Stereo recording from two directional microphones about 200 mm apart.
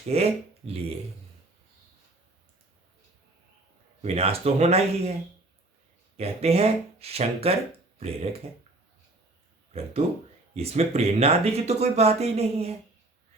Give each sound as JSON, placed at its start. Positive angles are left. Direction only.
{"t": 0.1, "sound": "speech", "side_deg": -30}
{"t": 4.0, "sound": "speech", "side_deg": -30}
{"t": 6.1, "sound": "speech", "side_deg": -30}
{"t": 10.5, "sound": "speech", "side_deg": -30}